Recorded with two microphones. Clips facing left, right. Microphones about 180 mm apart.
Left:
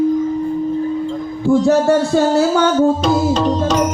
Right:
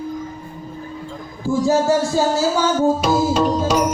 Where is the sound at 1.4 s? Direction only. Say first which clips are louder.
Left 4 dB; 60° left (ahead or behind).